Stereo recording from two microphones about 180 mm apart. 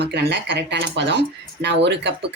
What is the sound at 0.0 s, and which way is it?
Speech, 70° right (ahead or behind).